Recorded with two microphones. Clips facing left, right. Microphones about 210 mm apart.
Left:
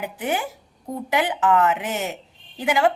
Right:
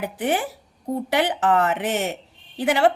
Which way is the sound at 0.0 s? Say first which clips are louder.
Right 2 dB; 35° right (ahead or behind).